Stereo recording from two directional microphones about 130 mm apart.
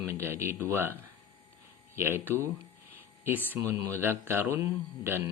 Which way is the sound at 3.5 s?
20° right (ahead or behind).